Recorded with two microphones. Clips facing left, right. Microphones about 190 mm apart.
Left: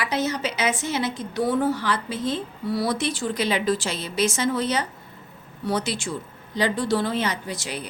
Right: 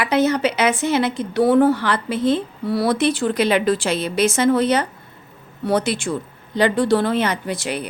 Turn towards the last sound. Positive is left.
turn(degrees=-60)  # may be behind; listen again after turning